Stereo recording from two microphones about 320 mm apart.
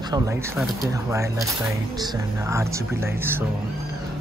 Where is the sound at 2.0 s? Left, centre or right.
Centre.